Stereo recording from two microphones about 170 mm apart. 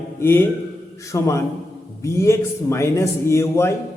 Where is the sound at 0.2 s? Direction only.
15° left (ahead or behind).